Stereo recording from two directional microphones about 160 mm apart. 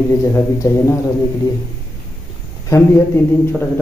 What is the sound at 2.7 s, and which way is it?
Speech, 20° left (ahead or behind).